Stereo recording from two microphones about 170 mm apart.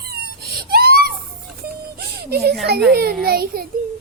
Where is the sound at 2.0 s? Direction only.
70° right (ahead or behind).